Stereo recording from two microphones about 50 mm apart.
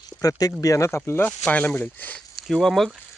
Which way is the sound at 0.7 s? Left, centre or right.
Left.